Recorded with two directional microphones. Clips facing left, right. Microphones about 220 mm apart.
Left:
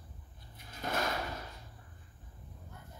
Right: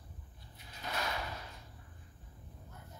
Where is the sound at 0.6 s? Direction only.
50° left (ahead or behind).